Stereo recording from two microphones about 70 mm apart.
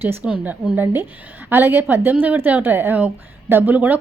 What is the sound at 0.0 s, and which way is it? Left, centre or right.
A woman's voice, right.